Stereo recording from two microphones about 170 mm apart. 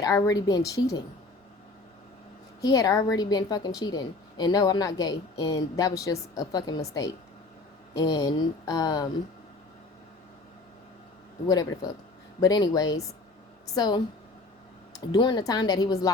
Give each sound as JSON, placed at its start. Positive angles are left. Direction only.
{"t": 0.0, "sound": "a woman's voice", "side_deg": 20}
{"t": 2.6, "sound": "a woman's voice", "side_deg": 20}
{"t": 12.4, "sound": "a woman's voice", "side_deg": 20}